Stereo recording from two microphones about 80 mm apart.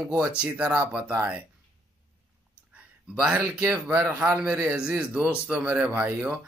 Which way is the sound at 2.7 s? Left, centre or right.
Centre.